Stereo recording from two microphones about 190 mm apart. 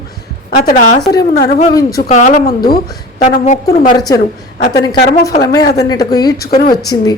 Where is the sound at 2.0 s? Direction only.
35° left (ahead or behind).